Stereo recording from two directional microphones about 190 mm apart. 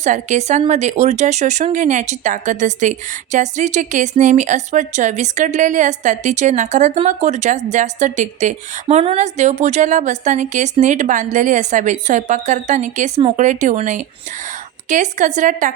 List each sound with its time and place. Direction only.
0.0 s speech: 40° right (ahead or behind)